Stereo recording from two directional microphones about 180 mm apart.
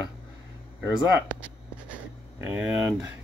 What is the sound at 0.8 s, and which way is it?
Speech, 10° right (ahead or behind).